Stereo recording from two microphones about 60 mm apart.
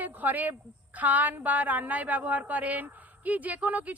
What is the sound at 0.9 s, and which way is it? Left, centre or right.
A woman's voice, right.